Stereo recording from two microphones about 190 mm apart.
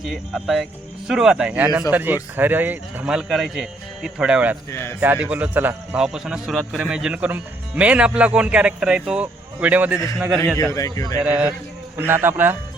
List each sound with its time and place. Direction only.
0.0 s speech: centre (ahead or behind)
4.7 s speech: 10° left (ahead or behind)
4.9 s speech: 10° right (ahead or behind)
10.6 s speech: 15° left (ahead or behind)
11.2 s speech: 10° right (ahead or behind)